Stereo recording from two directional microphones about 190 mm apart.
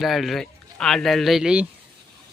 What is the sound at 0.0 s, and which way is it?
Speech, centre (ahead or behind).